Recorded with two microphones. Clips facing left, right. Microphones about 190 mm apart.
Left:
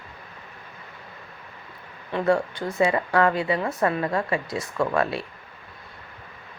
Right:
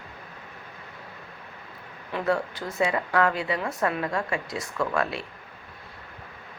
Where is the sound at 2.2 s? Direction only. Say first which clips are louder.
Left 4 dB; centre (ahead or behind).